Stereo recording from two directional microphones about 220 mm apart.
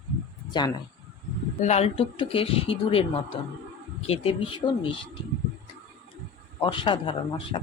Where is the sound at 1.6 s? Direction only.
30° left (ahead or behind).